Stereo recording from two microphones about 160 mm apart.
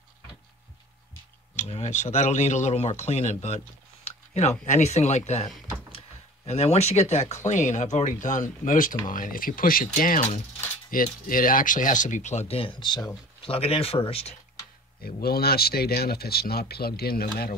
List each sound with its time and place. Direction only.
1.6 s speech: 45° left (ahead or behind)
5.9 s a sound: 40° left (ahead or behind)
7.4 s speech: 50° left (ahead or behind); by 13.2 s 25° left (ahead or behind)
13.4 s speech: 35° left (ahead or behind)
15.0 s speech: 70° left (ahead or behind)